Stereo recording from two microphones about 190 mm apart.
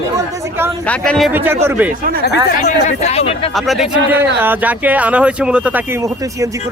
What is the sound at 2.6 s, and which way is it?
Speech, 35° left (ahead or behind).